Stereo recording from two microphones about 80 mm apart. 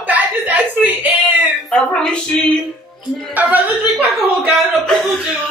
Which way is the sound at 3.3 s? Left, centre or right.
Right.